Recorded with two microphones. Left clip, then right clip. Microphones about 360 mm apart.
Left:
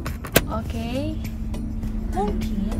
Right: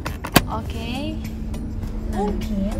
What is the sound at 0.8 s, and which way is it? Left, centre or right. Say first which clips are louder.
Speech: left 1 dB; left.